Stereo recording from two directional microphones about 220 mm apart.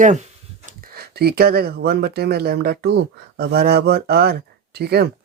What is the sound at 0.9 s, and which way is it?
Speech, 45° right (ahead or behind).